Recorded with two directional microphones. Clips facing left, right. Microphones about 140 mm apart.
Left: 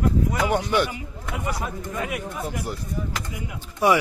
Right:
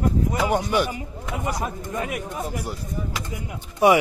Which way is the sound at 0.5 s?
10° right (ahead or behind).